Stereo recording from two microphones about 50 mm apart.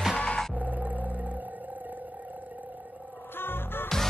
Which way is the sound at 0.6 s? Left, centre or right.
Right.